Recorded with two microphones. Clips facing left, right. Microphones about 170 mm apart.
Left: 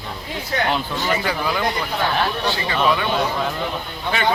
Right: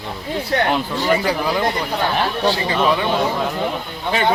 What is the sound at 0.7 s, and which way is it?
Speech, 35° right (ahead or behind).